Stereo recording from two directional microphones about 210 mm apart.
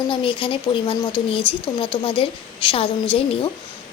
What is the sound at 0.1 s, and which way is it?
Speech, 25° left (ahead or behind).